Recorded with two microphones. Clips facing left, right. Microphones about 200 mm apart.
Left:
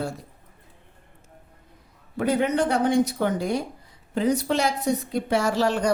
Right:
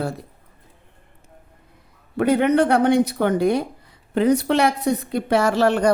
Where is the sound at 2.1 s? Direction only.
65° right (ahead or behind).